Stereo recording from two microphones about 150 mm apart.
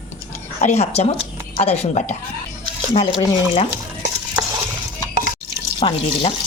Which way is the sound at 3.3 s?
40° left (ahead or behind).